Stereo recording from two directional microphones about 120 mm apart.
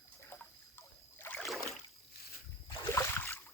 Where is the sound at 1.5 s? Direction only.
Centre (ahead or behind).